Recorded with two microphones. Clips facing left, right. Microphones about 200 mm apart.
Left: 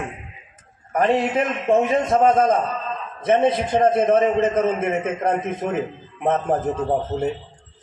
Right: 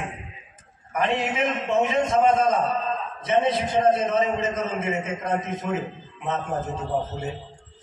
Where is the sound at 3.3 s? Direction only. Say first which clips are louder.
Left 4 dB; 55° left (ahead or behind).